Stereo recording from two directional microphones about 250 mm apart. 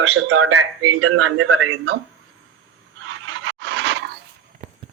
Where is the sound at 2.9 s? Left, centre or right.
Right.